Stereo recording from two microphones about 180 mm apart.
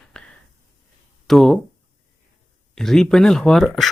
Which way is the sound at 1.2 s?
Centre (ahead or behind).